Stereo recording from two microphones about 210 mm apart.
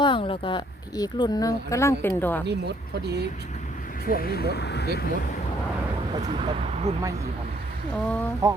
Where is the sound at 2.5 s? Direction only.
50° right (ahead or behind).